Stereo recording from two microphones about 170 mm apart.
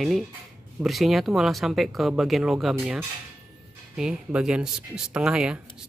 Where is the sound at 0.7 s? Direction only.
Centre (ahead or behind).